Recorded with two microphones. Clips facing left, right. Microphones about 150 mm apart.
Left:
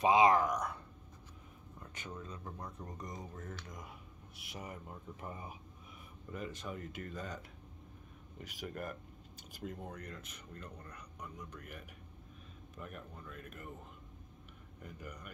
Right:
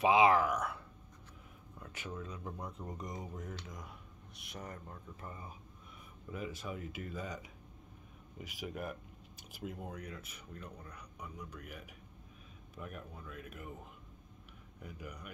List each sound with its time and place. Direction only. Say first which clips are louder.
0.0 s speech: even; centre (ahead or behind)
2.0 s speech: right 2 dB; 5° right (ahead or behind)
2.9 s speech: right 2 dB; 20° right (ahead or behind)
3.6 s speech: even; centre (ahead or behind)
4.8 s speech: left 2 dB; 15° left (ahead or behind)
6.3 s speech: right 1 dB; 5° right (ahead or behind)
14.8 s speech: right 1 dB; 10° right (ahead or behind)